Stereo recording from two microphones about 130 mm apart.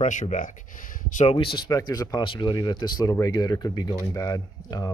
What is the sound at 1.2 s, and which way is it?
Speech, 45° left (ahead or behind).